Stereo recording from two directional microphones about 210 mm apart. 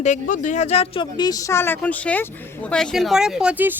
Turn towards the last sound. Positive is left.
turn(degrees=-5)  # may be behind; listen again after turning